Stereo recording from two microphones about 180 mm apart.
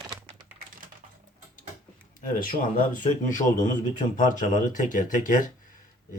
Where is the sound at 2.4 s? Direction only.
50° left (ahead or behind).